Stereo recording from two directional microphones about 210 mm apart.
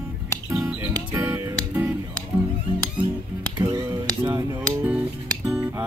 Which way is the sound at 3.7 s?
15° right (ahead or behind).